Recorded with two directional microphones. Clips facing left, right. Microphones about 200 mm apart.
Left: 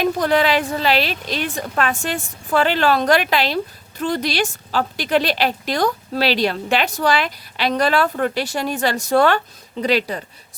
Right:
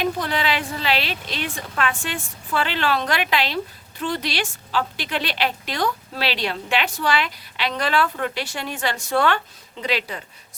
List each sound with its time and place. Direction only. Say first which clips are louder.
0.0 s a woman's voice: left 6 dB; 45° left (ahead or behind)